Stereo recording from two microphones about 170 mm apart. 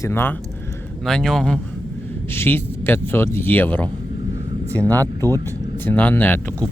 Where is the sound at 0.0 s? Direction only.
15° left (ahead or behind).